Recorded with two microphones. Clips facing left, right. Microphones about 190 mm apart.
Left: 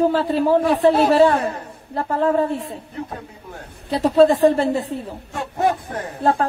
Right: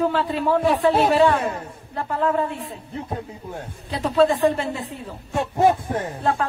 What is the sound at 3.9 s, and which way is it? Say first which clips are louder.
Speech: left 5 dB; 35° left (ahead or behind).